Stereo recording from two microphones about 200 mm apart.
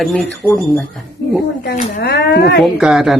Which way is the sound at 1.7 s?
55° left (ahead or behind).